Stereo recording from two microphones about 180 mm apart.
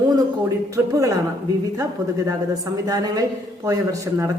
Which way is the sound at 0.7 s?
15° right (ahead or behind).